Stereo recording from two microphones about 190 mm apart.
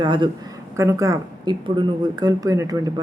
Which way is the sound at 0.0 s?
25° right (ahead or behind).